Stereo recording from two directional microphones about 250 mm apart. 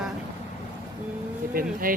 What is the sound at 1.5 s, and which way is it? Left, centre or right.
Speech, right.